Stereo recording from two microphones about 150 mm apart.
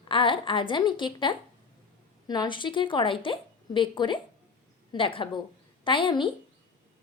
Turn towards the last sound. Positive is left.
turn(degrees=35)  # may be behind; listen again after turning